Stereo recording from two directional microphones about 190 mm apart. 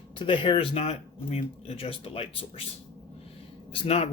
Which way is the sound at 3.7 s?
30° left (ahead or behind).